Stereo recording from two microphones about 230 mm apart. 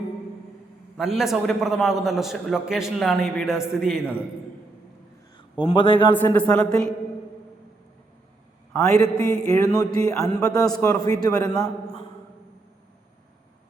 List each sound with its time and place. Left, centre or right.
0.9 s a man's voice: centre
5.5 s a man's voice: left
6.1 s a man's voice: centre
8.8 s speech: centre
10.6 s a man's voice: centre
10.8 s speech: centre